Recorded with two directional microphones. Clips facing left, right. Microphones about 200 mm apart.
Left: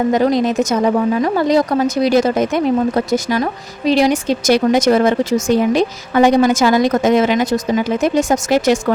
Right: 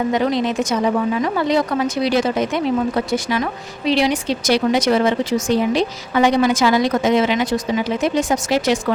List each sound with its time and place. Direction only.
0.1 s a woman's voice: 40° left (ahead or behind)